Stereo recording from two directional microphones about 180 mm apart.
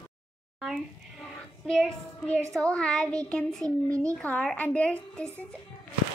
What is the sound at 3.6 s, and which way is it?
Speech, 20° right (ahead or behind).